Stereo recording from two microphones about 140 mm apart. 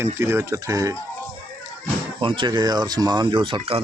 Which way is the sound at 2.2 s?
35° right (ahead or behind).